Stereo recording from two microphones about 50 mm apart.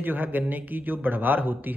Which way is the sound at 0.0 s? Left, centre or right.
Right.